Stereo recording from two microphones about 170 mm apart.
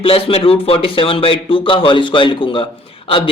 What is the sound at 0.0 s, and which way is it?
A man's voice, 35° left (ahead or behind).